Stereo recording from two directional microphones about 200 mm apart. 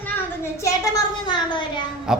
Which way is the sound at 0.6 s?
20° left (ahead or behind).